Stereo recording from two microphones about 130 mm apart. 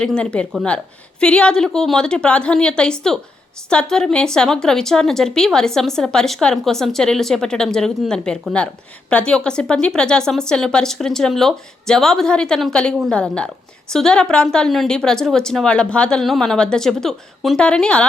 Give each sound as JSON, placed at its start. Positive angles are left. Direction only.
{"t": 0.0, "sound": "a woman's voice", "side_deg": 5}